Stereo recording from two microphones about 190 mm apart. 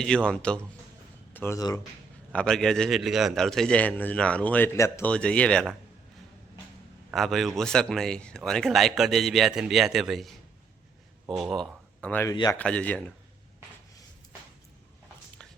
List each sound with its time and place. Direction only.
0.0 s a man's voice: 5° left (ahead or behind)
2.3 s a man's voice: 5° left (ahead or behind)
7.1 s a man's voice: centre (ahead or behind)
12.3 s speech: 20° left (ahead or behind)
12.5 s a man's voice: 5° left (ahead or behind)